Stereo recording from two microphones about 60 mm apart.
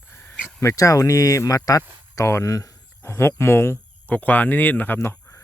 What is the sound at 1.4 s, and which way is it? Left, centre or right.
Speech, left.